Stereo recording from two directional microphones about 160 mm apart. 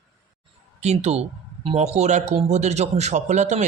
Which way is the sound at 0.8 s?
45° right (ahead or behind).